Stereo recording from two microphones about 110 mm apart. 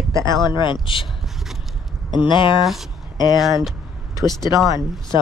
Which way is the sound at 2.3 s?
45° left (ahead or behind).